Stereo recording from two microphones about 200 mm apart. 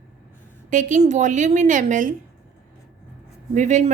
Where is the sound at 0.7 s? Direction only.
40° right (ahead or behind).